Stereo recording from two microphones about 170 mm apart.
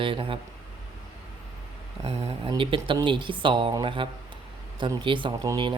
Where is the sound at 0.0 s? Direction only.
30° right (ahead or behind).